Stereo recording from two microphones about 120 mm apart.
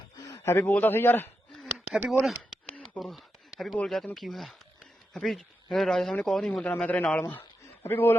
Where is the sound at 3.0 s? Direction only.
Centre (ahead or behind).